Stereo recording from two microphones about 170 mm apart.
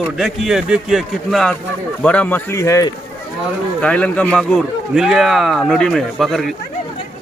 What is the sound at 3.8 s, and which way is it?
Speech, 5° left (ahead or behind).